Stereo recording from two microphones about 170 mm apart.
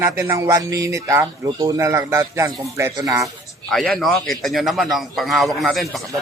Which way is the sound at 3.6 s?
Centre (ahead or behind).